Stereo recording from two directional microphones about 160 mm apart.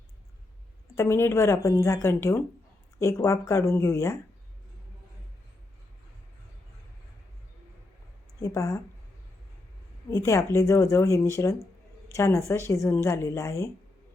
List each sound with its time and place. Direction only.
0.9 s a woman's voice: 15° left (ahead or behind)
8.4 s a woman's voice: 20° left (ahead or behind)
10.1 s a woman's voice: 20° left (ahead or behind)